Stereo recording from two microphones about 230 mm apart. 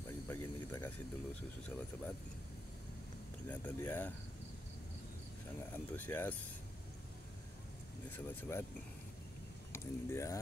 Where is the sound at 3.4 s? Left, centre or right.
Centre.